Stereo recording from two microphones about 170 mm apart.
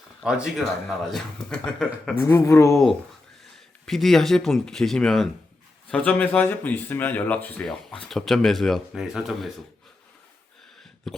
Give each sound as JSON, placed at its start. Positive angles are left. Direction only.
{"t": 0.2, "sound": "speech", "side_deg": -5}
{"t": 2.2, "sound": "speech", "side_deg": 15}
{"t": 3.8, "sound": "speech", "side_deg": 0}
{"t": 11.1, "sound": "speech", "side_deg": 0}